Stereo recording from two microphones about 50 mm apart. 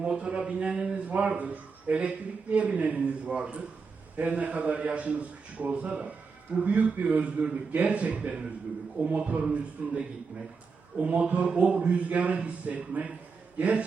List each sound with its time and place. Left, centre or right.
0.0 s a man's voice: right
1.0 s a man's voice: right
11.0 s a man's voice: right